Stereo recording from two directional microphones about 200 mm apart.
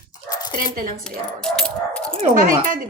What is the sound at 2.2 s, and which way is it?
Speech, 40° right (ahead or behind).